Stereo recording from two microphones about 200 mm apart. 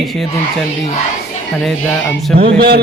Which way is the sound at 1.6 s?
Centre (ahead or behind).